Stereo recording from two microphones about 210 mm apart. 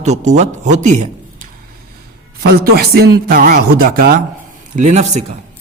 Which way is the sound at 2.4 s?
45° right (ahead or behind).